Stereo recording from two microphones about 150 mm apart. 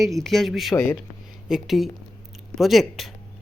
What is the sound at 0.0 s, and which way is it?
Speech, centre (ahead or behind).